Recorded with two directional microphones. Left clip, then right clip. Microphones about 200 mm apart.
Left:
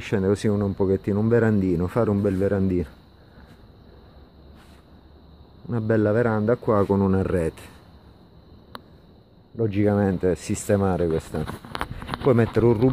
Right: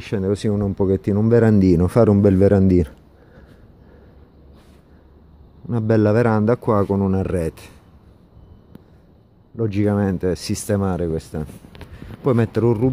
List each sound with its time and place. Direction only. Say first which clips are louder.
0.0 s speech: right 1 dB; centre (ahead or behind); by 2.9 s 30° right (ahead or behind)
5.7 s speech: right 4 dB; 20° right (ahead or behind)
7.0 s speech: right 1 dB; 5° right (ahead or behind)
9.6 s speech: right 1 dB; 15° right (ahead or behind)